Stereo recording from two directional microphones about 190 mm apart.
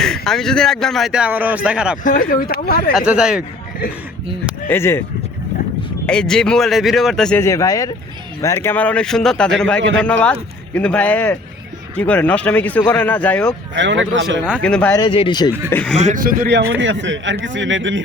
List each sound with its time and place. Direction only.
0.0 s speech: 5° left (ahead or behind)
2.0 s speech: 50° left (ahead or behind)
2.9 s speech: 5° right (ahead or behind)
4.7 s speech: 15° left (ahead or behind)
6.1 s speech: 5° left (ahead or behind)
7.4 s speech: 15° left (ahead or behind)
13.7 s speech: 75° right (ahead or behind)
14.6 s speech: 5° left (ahead or behind)
14.9 s speech: 25° left (ahead or behind)
15.7 s speech: 5° left (ahead or behind)
16.0 s a man's voice: 40° right (ahead or behind)
16.8 s speech: 75° right (ahead or behind)